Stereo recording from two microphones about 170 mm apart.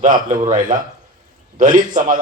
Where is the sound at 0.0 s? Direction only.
45° right (ahead or behind).